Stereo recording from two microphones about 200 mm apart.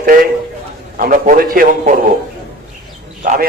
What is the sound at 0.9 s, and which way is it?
A man's voice, 45° right (ahead or behind).